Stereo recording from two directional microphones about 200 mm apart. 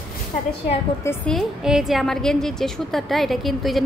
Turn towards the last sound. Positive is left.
turn(degrees=0)  # may be behind; listen again after turning